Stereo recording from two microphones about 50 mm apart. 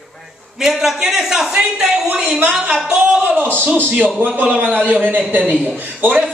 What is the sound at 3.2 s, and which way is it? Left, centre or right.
Speech, right.